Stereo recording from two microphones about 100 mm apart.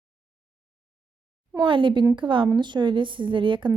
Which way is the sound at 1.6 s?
55° right (ahead or behind).